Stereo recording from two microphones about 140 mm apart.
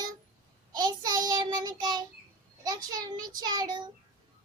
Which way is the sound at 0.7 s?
30° right (ahead or behind).